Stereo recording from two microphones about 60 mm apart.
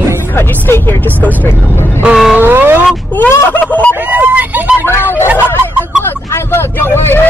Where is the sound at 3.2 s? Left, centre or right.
Left.